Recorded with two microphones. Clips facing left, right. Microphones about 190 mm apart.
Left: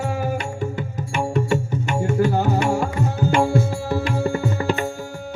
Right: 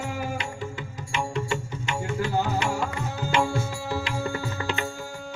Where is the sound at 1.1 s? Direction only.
50° left (ahead or behind).